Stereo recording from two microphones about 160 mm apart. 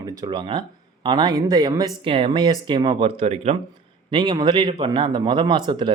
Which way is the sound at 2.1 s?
35° right (ahead or behind).